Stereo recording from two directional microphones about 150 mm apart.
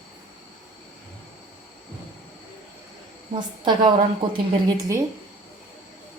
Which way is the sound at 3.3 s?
30° right (ahead or behind).